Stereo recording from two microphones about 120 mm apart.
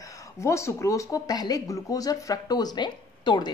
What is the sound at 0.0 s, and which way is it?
Speech, 30° left (ahead or behind).